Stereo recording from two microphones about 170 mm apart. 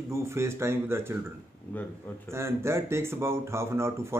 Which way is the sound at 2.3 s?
15° right (ahead or behind).